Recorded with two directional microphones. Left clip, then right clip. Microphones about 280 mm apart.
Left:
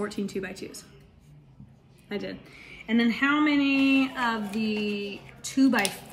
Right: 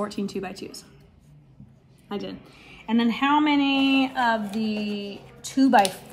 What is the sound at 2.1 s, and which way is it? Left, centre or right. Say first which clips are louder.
A woman's voice: right 1 dB; centre.